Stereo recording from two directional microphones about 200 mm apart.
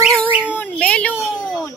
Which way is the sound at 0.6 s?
5° left (ahead or behind).